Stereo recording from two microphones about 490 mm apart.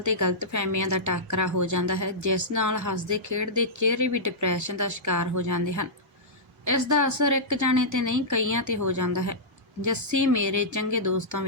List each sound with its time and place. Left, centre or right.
0.0 s a woman's voice: right